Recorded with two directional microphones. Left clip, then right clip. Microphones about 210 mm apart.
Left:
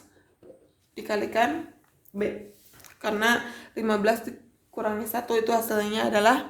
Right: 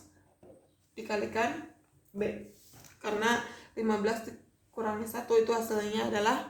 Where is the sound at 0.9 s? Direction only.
55° left (ahead or behind).